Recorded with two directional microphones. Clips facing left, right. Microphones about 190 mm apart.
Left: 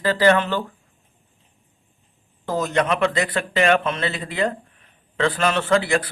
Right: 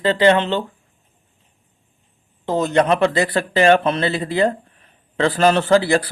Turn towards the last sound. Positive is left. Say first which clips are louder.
# right 4 dB
turn(degrees=-35)  # may be behind; listen again after turning